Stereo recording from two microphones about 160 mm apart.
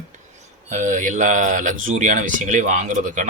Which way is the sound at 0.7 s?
50° right (ahead or behind).